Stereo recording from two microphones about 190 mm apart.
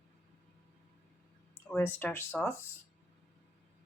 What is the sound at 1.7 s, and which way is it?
Speech, 10° left (ahead or behind).